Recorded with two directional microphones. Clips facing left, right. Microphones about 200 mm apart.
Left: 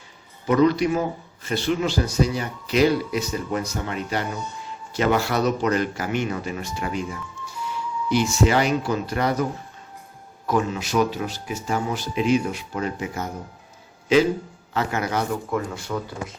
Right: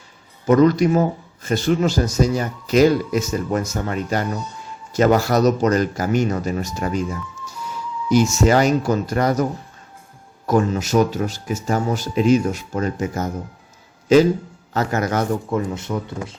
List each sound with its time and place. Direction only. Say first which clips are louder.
0.4 s speech: right 4 dB; 45° right (ahead or behind)
8.1 s speech: right 5 dB; 45° right (ahead or behind)
15.4 s speech: right 4 dB; 20° right (ahead or behind)